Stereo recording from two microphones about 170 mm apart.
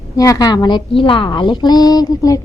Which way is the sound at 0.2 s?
20° left (ahead or behind).